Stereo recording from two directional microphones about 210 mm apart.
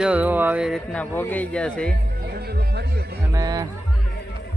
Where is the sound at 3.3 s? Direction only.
15° right (ahead or behind).